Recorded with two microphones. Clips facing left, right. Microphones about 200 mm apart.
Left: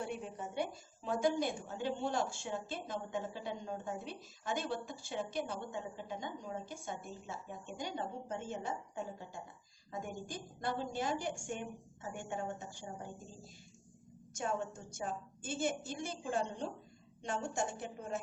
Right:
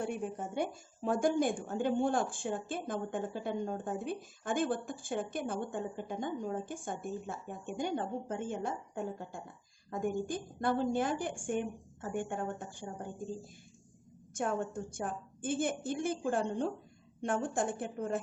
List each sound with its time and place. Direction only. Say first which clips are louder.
0.0 s a woman's voice: right 5 dB; 50° right (ahead or behind)
14.3 s a woman's voice: right 4 dB; 55° right (ahead or behind)